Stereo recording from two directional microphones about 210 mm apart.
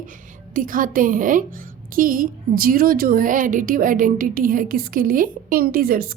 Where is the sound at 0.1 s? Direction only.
40° right (ahead or behind).